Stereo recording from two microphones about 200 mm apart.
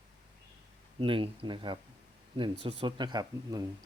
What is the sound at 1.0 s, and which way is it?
Speech, 25° right (ahead or behind).